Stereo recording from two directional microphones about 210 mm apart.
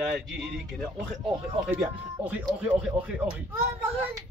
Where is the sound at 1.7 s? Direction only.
5° right (ahead or behind).